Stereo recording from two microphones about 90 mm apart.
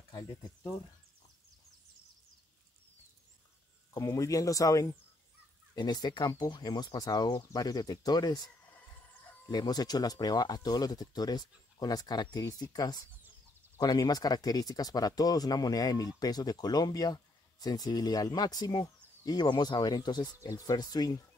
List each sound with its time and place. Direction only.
3.9 s speech: 35° left (ahead or behind)
5.8 s speech: 50° left (ahead or behind)
9.5 s speech: 50° left (ahead or behind)
20.3 s speech: 40° left (ahead or behind)